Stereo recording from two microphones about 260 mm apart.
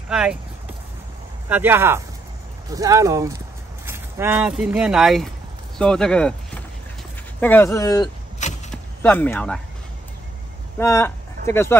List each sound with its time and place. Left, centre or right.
0.1 s speech: centre
1.5 s speech: centre
8.4 s a sound: left
9.0 s speech: centre
10.8 s speech: centre